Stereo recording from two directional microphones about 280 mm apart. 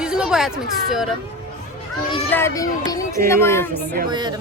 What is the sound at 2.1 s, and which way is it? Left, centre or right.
Speech, centre.